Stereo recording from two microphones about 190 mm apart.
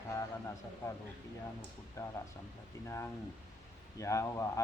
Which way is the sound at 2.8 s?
15° left (ahead or behind).